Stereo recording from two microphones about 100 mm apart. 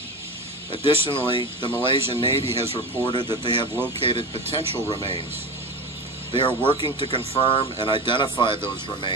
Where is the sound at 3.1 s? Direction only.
50° left (ahead or behind).